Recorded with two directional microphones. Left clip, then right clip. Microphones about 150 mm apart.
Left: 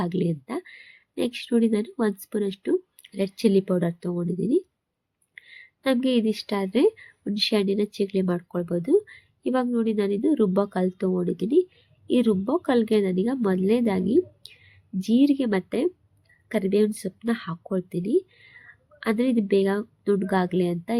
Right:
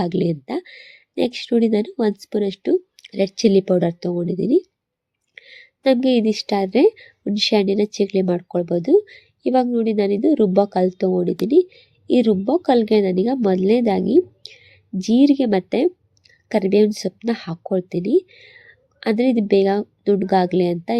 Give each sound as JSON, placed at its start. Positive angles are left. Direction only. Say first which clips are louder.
{"t": 0.0, "sound": "a woman's voice", "louder": "right 6 dB", "side_deg": -20}